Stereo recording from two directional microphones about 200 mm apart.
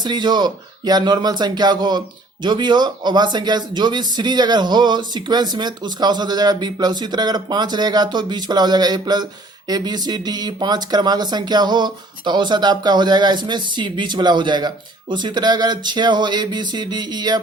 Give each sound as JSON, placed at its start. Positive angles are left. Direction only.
{"t": 0.0, "sound": "speech", "side_deg": -20}